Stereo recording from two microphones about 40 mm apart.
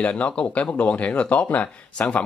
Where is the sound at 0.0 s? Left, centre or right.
Left.